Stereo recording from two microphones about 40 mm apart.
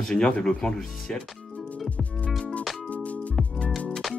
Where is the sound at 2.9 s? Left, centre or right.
Left.